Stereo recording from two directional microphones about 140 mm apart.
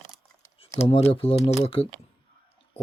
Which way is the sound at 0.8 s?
45° left (ahead or behind).